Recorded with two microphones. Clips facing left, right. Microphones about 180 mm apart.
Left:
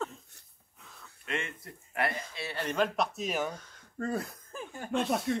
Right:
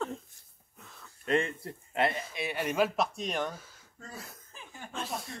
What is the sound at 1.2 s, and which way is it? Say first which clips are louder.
Speech: right 8 dB; 35° right (ahead or behind).